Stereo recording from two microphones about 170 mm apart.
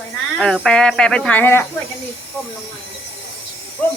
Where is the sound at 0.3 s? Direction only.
5° left (ahead or behind).